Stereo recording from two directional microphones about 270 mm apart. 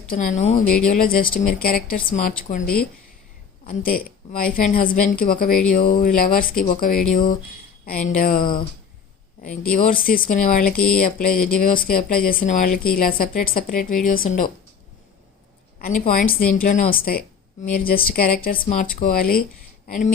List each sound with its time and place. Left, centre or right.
0.1 s speech: left
9.7 s speech: left
16.0 s speech: left